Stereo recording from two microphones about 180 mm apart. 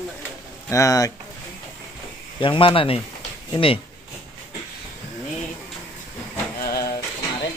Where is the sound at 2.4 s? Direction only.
30° left (ahead or behind).